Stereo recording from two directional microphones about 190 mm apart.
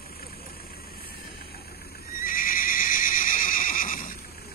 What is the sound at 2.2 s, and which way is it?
Neigh, 45° left (ahead or behind).